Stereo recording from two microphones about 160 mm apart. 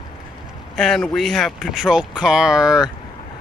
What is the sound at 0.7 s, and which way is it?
Speech, centre (ahead or behind).